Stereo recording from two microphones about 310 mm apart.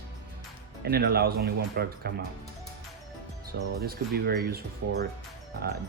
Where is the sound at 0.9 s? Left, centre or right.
Right.